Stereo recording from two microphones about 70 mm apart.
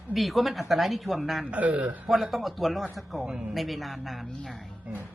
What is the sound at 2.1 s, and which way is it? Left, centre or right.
A woman's voice, centre.